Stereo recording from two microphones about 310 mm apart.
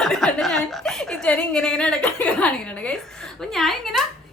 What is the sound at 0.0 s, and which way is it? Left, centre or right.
A woman's voice, centre.